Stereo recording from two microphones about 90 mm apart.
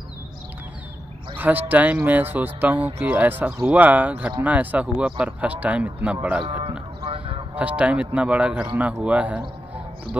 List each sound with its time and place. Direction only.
1.3 s speech: 20° right (ahead or behind)
7.1 s a sound: 90° right
7.5 s speech: 15° right (ahead or behind)